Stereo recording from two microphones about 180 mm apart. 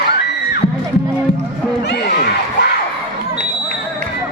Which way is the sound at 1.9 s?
70° left (ahead or behind).